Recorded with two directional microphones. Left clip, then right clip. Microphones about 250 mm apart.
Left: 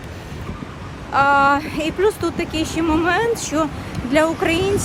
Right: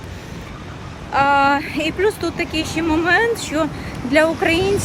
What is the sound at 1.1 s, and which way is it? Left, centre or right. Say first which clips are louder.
Speech: even; centre.